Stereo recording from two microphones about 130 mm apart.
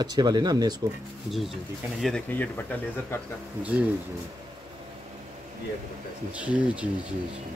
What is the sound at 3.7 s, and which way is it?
Speech, 10° right (ahead or behind).